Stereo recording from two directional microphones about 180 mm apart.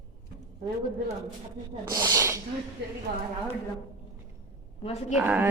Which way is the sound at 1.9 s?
20° right (ahead or behind).